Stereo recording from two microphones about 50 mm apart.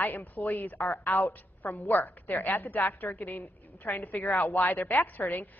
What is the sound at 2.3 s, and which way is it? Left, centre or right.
Speech, left.